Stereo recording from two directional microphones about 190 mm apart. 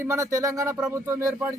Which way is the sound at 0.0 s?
15° right (ahead or behind).